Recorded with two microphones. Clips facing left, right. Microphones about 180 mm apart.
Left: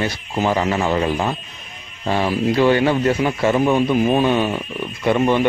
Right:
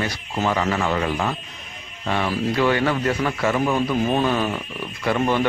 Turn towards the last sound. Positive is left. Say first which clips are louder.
# left 4 dB
turn(degrees=20)  # may be behind; listen again after turning